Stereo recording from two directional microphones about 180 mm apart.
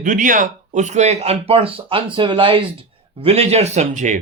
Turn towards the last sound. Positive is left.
turn(degrees=-40)  # may be behind; listen again after turning